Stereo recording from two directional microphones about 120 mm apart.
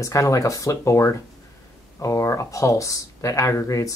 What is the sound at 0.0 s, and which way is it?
Speech, 25° left (ahead or behind).